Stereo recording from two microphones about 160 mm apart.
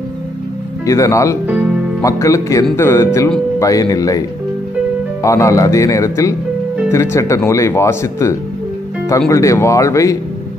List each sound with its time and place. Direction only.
0.8 s speech: 20° left (ahead or behind)
1.5 s music: 5° right (ahead or behind)
2.0 s speech: 20° left (ahead or behind)
5.2 s speech: 20° left (ahead or behind)